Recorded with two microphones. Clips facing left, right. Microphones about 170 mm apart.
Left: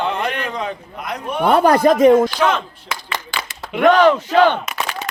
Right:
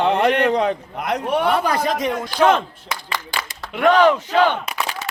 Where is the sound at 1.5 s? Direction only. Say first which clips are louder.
Left 7 dB; 55° left (ahead or behind).